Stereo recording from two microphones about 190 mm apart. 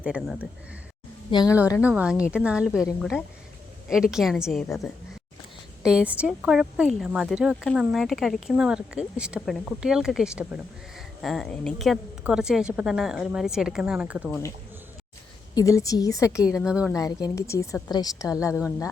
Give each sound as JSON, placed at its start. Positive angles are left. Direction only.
{"t": 0.0, "sound": "speech", "side_deg": 0}
{"t": 1.3, "sound": "a woman's voice", "side_deg": 20}
{"t": 1.8, "sound": "speech", "side_deg": -5}
{"t": 3.8, "sound": "speech", "side_deg": 0}
{"t": 15.5, "sound": "a woman's voice", "side_deg": 15}
{"t": 16.5, "sound": "speech", "side_deg": -5}
{"t": 16.9, "sound": "a woman's voice", "side_deg": 20}